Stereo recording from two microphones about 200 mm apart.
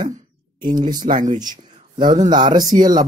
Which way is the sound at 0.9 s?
40° right (ahead or behind).